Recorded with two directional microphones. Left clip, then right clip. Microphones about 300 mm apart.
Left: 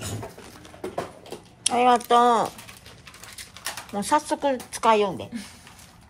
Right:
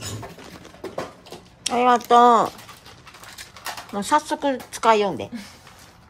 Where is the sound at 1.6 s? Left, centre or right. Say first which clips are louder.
Right 1 dB; centre.